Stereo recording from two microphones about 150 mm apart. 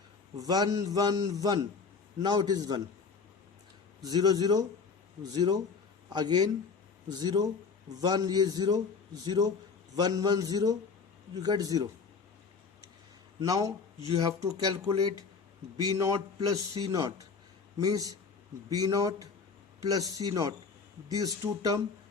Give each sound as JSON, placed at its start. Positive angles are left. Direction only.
{"t": 0.3, "sound": "a man's voice", "side_deg": -25}
{"t": 4.0, "sound": "a man's voice", "side_deg": -25}
{"t": 13.4, "sound": "a man's voice", "side_deg": -20}